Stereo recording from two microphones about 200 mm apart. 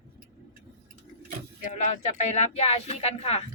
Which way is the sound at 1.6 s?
40° left (ahead or behind).